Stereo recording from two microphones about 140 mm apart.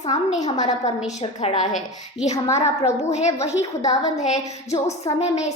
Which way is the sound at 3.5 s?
25° left (ahead or behind).